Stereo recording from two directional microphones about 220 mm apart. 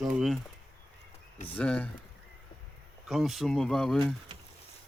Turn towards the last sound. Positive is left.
turn(degrees=0)  # may be behind; listen again after turning